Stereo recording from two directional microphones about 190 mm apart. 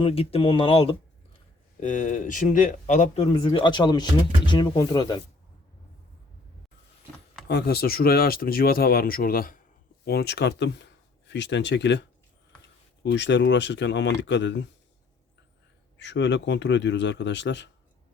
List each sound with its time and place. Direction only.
0.0 s speech: 30° left (ahead or behind)
1.8 s speech: 40° left (ahead or behind)
3.3 s speech: 25° left (ahead or behind)
7.4 s speech: 60° left (ahead or behind)
13.1 s speech: 70° left (ahead or behind)
16.0 s speech: 70° left (ahead or behind)